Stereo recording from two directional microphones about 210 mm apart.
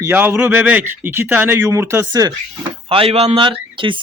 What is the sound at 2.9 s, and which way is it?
A man's voice, 25° right (ahead or behind).